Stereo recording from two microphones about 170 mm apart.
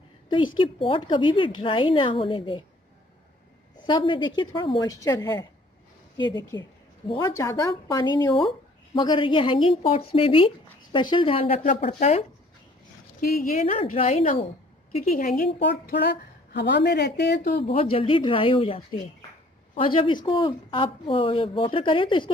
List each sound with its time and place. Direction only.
0.3 s a woman's voice: 30° left (ahead or behind)
3.8 s speech: 30° left (ahead or behind)
6.5 s a woman's voice: 25° left (ahead or behind)
13.3 s speech: 55° left (ahead or behind)
13.7 s a woman's voice: 35° left (ahead or behind)
14.4 s a sound: 35° left (ahead or behind)
15.0 s a woman's voice: 55° left (ahead or behind)
17.6 s a woman's voice: 35° left (ahead or behind)